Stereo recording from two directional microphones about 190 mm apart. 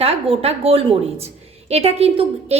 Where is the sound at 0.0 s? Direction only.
30° right (ahead or behind).